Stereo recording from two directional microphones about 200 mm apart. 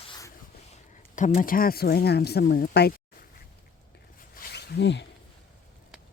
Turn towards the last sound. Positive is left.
turn(degrees=60)  # may be behind; listen again after turning